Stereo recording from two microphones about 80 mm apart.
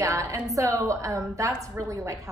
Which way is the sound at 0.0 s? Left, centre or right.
Right.